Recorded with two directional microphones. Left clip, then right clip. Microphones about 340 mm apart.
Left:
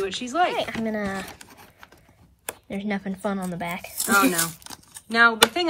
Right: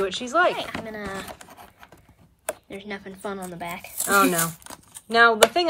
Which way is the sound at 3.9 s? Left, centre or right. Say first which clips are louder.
Right 1 dB; centre.